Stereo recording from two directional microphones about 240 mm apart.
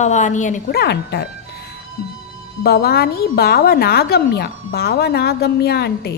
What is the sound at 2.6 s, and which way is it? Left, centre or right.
A woman's voice, left.